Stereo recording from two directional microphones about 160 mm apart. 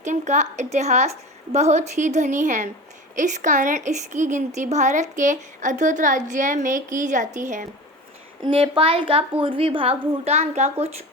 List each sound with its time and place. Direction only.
0.0 s a woman's voice: 50° right (ahead or behind)
8.4 s a child's voice: 35° right (ahead or behind)